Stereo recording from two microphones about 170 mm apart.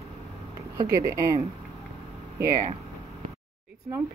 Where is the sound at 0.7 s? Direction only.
20° right (ahead or behind).